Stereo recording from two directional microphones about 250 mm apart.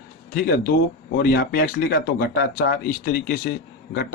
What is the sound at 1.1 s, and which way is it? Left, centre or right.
Speech, left.